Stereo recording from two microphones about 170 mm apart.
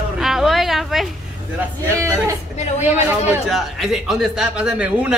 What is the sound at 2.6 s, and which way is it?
Speech, 40° left (ahead or behind).